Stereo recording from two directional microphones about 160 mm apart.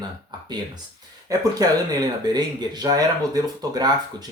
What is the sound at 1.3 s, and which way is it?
Speech, 25° right (ahead or behind).